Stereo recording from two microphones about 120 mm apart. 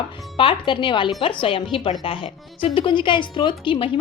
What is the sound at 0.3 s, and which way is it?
A woman's voice, 45° left (ahead or behind).